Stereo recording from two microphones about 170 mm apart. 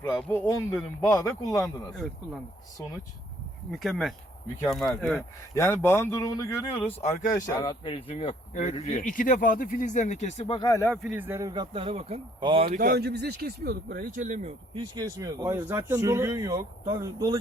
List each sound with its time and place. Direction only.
0.0 s speech: 10° left (ahead or behind)
1.6 s speech: centre (ahead or behind)
3.7 s speech: centre (ahead or behind)
5.5 s speech: 15° left (ahead or behind)
7.3 s speech: 50° left (ahead or behind)
7.5 s speech: 25° left (ahead or behind)
9.0 s speech: 50° left (ahead or behind); by 10.8 s 25° left (ahead or behind)
10.9 s speech: 5° right (ahead or behind); by 12.6 s 30° right (ahead or behind)
12.7 s speech: 55° right (ahead or behind)
14.8 s speech: 20° right (ahead or behind)